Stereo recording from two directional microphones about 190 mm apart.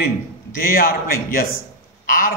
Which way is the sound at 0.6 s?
50° left (ahead or behind).